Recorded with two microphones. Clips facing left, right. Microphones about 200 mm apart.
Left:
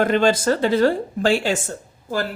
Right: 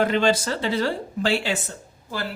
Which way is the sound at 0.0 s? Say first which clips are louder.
Left 3 dB; 50° left (ahead or behind).